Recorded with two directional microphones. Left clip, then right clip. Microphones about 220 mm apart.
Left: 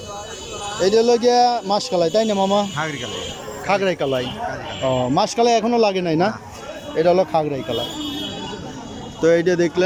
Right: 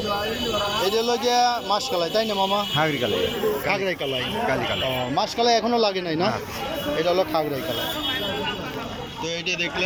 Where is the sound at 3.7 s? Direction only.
15° left (ahead or behind).